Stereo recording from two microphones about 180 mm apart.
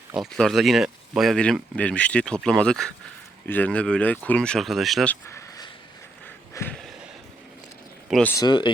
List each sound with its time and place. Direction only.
0.2 s speech: centre (ahead or behind)
5.3 s a sound: 20° left (ahead or behind)
8.1 s speech: 10° left (ahead or behind)
8.4 s speech: 25° left (ahead or behind)